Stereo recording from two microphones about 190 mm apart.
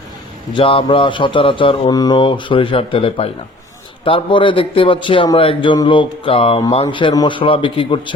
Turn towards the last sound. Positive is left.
turn(degrees=25)  # may be behind; listen again after turning